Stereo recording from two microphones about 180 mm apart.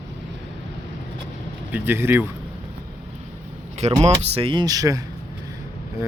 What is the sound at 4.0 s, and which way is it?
Speech, 35° right (ahead or behind).